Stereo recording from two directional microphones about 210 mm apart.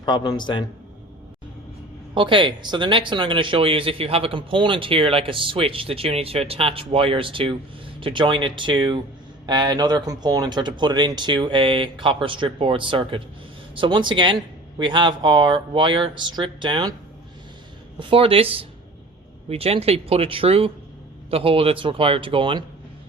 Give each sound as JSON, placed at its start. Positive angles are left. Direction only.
{"t": 0.0, "sound": "a man's voice", "side_deg": 20}
{"t": 2.1, "sound": "speech", "side_deg": -25}
{"t": 18.1, "sound": "speech", "side_deg": -25}